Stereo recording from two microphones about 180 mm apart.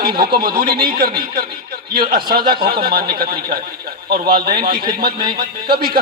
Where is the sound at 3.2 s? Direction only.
55° right (ahead or behind).